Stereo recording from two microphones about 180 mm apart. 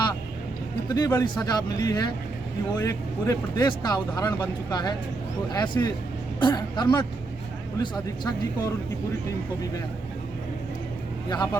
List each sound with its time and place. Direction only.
0.9 s speech: 20° left (ahead or behind)